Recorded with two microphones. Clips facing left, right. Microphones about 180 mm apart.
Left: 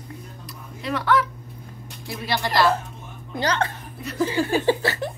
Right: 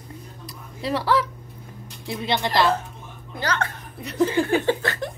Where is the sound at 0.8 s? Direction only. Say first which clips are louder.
Even; 30° right (ahead or behind).